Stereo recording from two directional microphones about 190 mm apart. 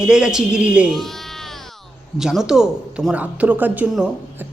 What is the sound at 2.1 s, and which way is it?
A woman's voice, centre (ahead or behind).